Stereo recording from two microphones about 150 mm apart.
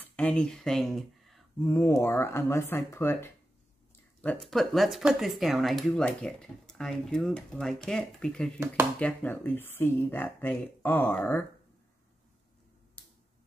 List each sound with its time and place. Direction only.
0.0 s speech: 10° left (ahead or behind)
1.7 s speech: 15° left (ahead or behind)
4.2 s speech: 5° left (ahead or behind)
13.0 s finger snapping: 10° left (ahead or behind)